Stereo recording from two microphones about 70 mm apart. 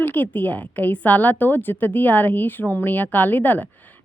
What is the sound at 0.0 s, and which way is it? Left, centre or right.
Speech, left.